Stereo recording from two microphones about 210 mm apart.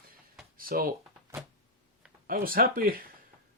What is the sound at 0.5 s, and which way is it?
Speech, 45° right (ahead or behind).